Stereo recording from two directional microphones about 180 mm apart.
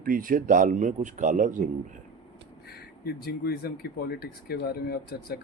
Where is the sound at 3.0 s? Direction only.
60° left (ahead or behind).